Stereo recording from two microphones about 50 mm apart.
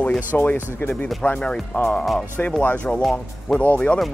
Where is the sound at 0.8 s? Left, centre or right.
Left.